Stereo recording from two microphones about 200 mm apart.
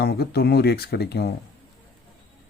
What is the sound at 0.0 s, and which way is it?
Speech, 50° left (ahead or behind).